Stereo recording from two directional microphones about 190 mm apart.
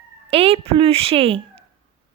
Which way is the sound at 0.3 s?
30° right (ahead or behind).